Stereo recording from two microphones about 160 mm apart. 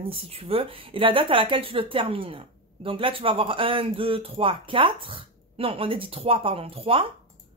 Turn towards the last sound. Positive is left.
turn(degrees=-35)  # may be behind; listen again after turning